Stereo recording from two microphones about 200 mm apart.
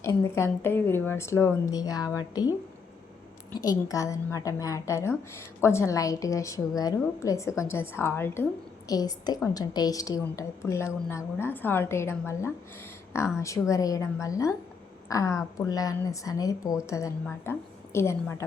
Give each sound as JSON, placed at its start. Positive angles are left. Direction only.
{"t": 0.0, "sound": "a woman's voice", "side_deg": 15}
{"t": 3.6, "sound": "a woman's voice", "side_deg": 20}